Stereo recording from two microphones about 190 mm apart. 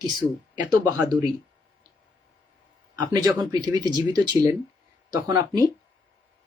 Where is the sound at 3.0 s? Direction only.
20° right (ahead or behind).